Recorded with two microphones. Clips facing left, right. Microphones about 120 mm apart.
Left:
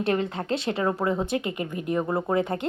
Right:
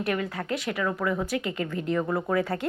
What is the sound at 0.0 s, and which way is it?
A woman's voice, 25° left (ahead or behind).